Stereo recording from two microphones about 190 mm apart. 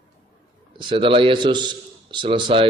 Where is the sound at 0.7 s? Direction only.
25° right (ahead or behind).